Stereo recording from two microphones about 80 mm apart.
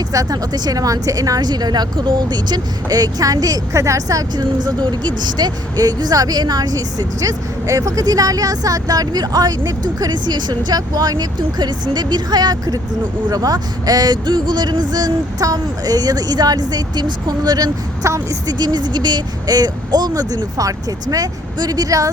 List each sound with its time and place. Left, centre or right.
0.1 s speech: right
0.5 s speech: right
14.3 s speech: right
18.0 s a woman's voice: right
18.4 s speech: right